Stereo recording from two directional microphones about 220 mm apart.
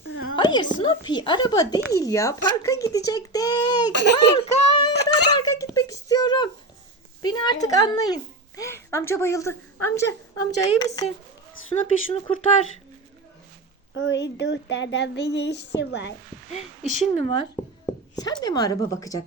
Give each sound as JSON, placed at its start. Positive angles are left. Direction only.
{"t": 0.3, "sound": "a woman's voice", "side_deg": 20}
{"t": 5.3, "sound": "a sound", "side_deg": 15}
{"t": 7.2, "sound": "a woman's voice", "side_deg": 20}
{"t": 11.7, "sound": "a woman's voice", "side_deg": 25}
{"t": 13.9, "sound": "a sound", "side_deg": 55}
{"t": 16.5, "sound": "a woman's voice", "side_deg": 30}